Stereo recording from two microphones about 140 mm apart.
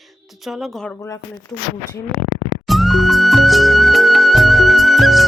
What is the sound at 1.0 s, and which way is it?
Speech, 25° left (ahead or behind).